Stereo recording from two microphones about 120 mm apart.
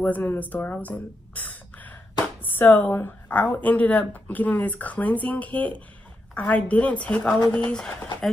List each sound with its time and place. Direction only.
0.0 s speech: 15° left (ahead or behind)